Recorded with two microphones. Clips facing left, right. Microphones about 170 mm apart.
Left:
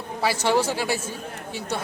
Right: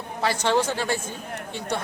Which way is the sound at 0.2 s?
10° left (ahead or behind).